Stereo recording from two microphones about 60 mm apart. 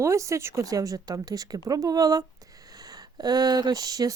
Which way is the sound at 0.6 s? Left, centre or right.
Right.